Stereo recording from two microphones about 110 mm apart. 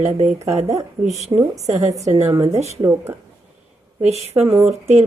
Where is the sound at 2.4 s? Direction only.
75° right (ahead or behind).